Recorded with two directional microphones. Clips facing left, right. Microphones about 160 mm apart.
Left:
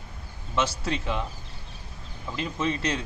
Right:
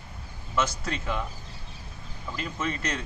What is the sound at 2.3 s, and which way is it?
Speech, 25° left (ahead or behind).